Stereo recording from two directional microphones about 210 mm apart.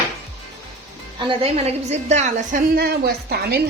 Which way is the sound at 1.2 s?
25° right (ahead or behind).